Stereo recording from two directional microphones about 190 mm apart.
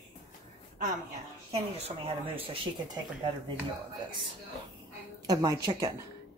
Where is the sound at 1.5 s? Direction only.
30° right (ahead or behind).